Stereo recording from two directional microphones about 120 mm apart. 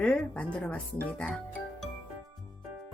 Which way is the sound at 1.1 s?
10° left (ahead or behind).